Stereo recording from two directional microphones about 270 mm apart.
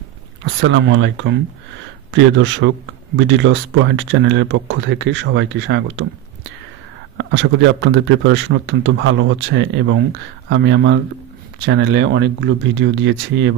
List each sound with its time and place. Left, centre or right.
0.6 s speech: right
7.2 s speech: right